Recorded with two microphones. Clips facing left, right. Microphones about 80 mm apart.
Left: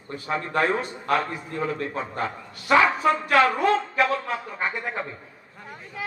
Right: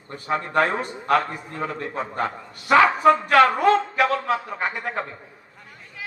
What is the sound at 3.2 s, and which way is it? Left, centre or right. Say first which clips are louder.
A man's voice: right 3 dB; right.